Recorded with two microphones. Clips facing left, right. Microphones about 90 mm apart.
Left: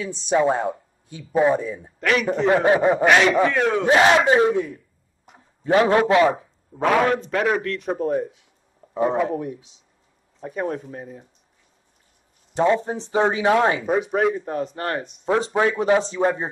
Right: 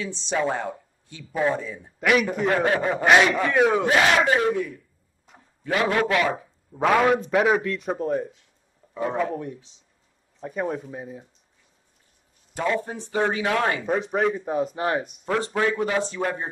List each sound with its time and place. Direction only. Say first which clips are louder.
0.3 s speech: left 6 dB; 20° left (ahead or behind)
2.0 s a man's voice: right 1 dB; 10° right (ahead or behind)
2.2 s speech: left 5 dB; 20° left (ahead or behind)
3.5 s speech: right 1 dB; 10° right (ahead or behind)
3.8 s a man's voice: left 4 dB; 25° left (ahead or behind)
6.7 s speech: even; centre (ahead or behind)
8.9 s speech: left 6 dB; 25° left (ahead or behind)
9.2 s speech: left 3 dB; 10° left (ahead or behind)
12.5 s speech: left 6 dB; 25° left (ahead or behind)
13.8 s speech: left 3 dB; 5° left (ahead or behind)
15.2 s speech: left 5 dB; 20° left (ahead or behind)